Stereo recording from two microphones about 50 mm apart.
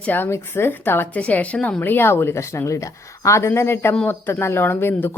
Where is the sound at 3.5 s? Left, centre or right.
Left.